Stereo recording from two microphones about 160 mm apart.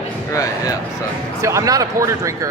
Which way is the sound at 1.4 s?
20° right (ahead or behind).